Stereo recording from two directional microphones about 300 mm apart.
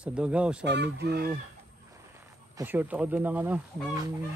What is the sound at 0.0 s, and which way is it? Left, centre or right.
Speech, centre.